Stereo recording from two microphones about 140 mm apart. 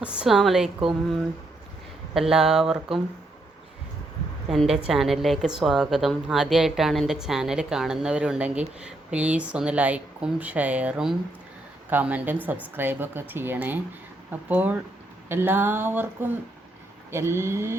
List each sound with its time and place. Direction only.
0.0 s a woman's voice: 5° right (ahead or behind)
2.1 s a woman's voice: 5° right (ahead or behind)
4.4 s a woman's voice: centre (ahead or behind); by 17.7 s 20° right (ahead or behind)